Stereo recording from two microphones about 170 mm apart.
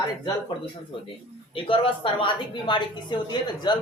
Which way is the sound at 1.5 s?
30° left (ahead or behind).